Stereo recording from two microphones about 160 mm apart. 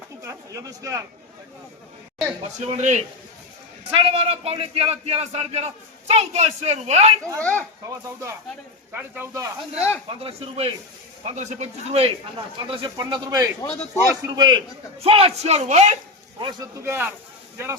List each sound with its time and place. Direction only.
0.3 s speech: 20° right (ahead or behind)
2.6 s a man's voice: 45° right (ahead or behind)
7.3 s speech: 10° left (ahead or behind)
7.9 s speech: 20° right (ahead or behind)
10.1 s a man's voice: 35° right (ahead or behind)
13.6 s a man's voice: 35° left (ahead or behind)
14.3 s speech: 25° right (ahead or behind)
15.0 s a man's voice: 35° right (ahead or behind)
16.4 s speech: 25° right (ahead or behind)